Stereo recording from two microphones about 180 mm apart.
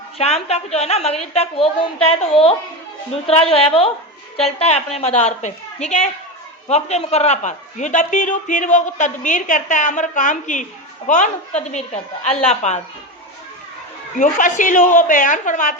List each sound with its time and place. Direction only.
0.2 s a woman's voice: 35° left (ahead or behind)
14.2 s a man's voice: 45° left (ahead or behind)